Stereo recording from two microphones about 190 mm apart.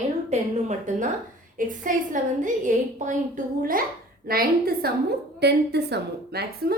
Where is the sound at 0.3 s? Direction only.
35° right (ahead or behind).